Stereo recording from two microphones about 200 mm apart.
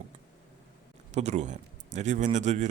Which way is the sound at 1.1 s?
35° right (ahead or behind).